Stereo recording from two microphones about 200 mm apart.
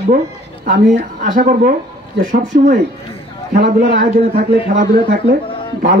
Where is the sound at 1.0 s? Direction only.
35° right (ahead or behind).